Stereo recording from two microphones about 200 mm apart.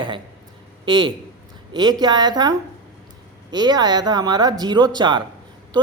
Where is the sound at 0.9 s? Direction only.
25° right (ahead or behind).